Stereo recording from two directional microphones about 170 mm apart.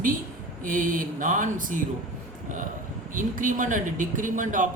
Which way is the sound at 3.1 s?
50° right (ahead or behind).